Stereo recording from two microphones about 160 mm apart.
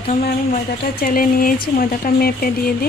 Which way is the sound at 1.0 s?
60° left (ahead or behind).